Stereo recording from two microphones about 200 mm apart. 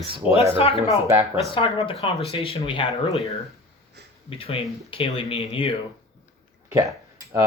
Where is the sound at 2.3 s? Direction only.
30° left (ahead or behind).